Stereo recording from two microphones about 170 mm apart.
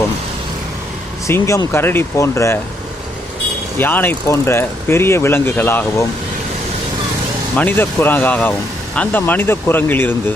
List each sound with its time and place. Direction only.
1.3 s speech: 15° left (ahead or behind)
3.8 s speech: 10° left (ahead or behind)
7.5 s speech: 10° left (ahead or behind)